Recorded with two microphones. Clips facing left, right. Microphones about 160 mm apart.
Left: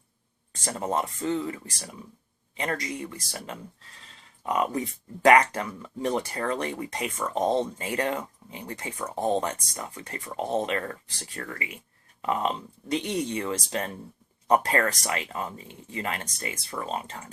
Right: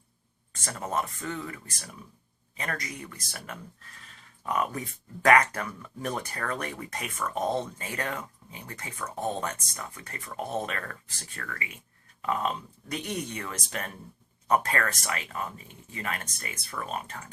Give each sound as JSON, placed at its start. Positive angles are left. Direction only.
{"t": 0.6, "sound": "speech", "side_deg": 25}